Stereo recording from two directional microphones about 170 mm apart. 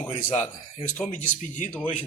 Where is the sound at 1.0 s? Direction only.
45° left (ahead or behind).